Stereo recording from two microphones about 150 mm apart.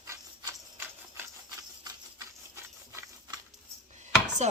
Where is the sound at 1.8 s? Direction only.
25° right (ahead or behind).